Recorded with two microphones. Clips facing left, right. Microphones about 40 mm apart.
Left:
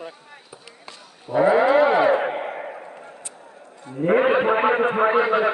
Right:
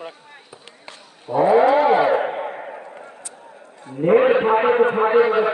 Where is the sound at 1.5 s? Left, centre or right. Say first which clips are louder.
Right 3 dB; centre.